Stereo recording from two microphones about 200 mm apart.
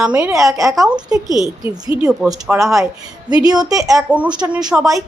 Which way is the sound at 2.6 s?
15° right (ahead or behind).